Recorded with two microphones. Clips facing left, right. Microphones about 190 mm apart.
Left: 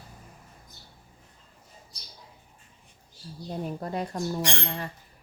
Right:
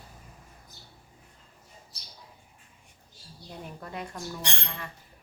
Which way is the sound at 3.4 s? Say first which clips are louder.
Left 9 dB; 40° left (ahead or behind).